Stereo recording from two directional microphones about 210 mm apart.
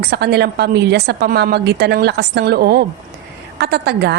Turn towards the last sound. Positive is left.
turn(degrees=-50)  # may be behind; listen again after turning